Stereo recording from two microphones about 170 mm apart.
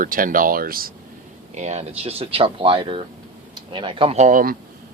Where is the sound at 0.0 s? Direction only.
55° right (ahead or behind).